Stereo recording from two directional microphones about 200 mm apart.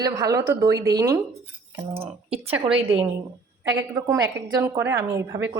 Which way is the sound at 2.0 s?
30° right (ahead or behind).